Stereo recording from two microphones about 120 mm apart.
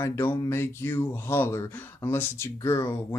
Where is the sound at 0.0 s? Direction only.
20° left (ahead or behind).